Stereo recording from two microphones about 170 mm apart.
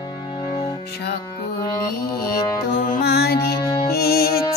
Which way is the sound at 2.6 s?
65° left (ahead or behind).